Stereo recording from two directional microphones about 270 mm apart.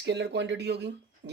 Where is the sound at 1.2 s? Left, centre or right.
Right.